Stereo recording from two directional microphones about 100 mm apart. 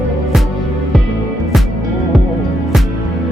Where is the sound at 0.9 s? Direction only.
Centre (ahead or behind).